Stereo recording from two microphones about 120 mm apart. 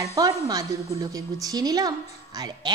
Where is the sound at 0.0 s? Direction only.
30° right (ahead or behind).